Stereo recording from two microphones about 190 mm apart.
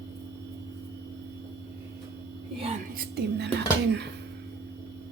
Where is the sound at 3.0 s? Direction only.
60° right (ahead or behind).